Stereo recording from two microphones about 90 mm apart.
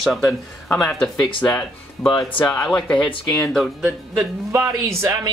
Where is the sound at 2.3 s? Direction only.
15° left (ahead or behind).